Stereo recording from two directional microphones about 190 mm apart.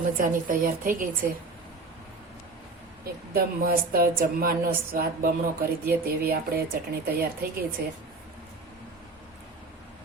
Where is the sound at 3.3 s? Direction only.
50° right (ahead or behind).